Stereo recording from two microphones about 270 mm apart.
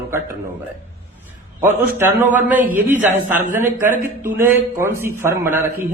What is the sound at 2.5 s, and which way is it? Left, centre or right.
A man's voice, centre.